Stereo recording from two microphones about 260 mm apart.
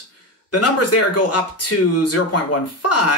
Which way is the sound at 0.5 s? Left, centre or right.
Left.